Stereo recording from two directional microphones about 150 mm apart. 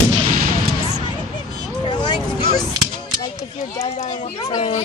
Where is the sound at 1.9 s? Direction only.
30° left (ahead or behind).